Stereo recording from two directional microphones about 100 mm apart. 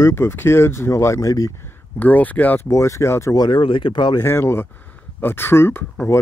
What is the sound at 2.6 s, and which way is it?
Speech, 30° left (ahead or behind).